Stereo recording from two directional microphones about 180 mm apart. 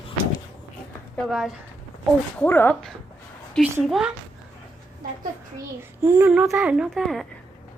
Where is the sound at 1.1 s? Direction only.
Centre (ahead or behind).